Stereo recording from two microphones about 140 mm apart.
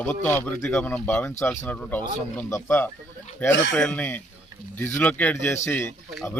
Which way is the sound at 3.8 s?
10° left (ahead or behind).